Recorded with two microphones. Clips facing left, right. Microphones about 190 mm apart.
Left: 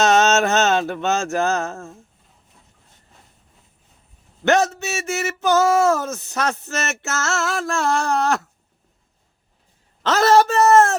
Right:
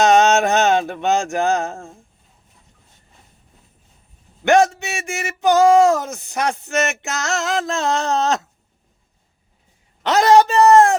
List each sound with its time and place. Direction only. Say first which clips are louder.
0.0 s speech: right 2 dB; 15° right (ahead or behind)
4.4 s speech: right 3 dB; 15° right (ahead or behind)
10.0 s speech: right 2 dB; 15° right (ahead or behind)